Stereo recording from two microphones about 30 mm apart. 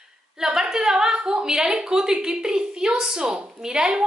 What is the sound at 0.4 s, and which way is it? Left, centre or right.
A woman's voice, right.